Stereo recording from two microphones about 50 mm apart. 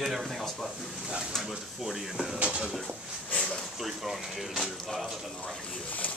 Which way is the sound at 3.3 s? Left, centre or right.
Centre.